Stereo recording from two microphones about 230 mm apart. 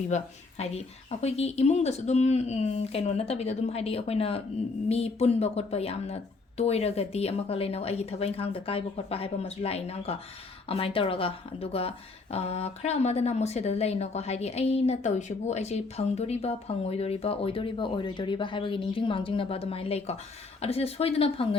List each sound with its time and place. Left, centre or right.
0.1 s speech: left